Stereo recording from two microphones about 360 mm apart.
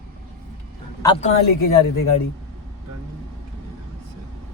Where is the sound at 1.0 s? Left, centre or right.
Centre.